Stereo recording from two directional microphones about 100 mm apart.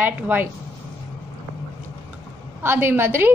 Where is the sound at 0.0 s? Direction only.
20° right (ahead or behind).